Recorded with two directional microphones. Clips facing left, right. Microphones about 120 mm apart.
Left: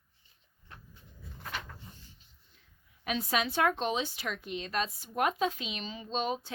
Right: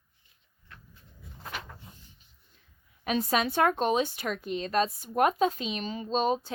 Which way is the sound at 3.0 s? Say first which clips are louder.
Right 4 dB; 40° right (ahead or behind).